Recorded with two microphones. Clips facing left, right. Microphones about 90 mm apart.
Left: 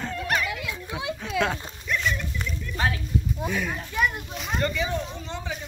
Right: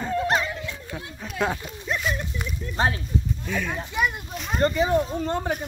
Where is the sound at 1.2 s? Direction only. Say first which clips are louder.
Left 5 dB; 5° right (ahead or behind).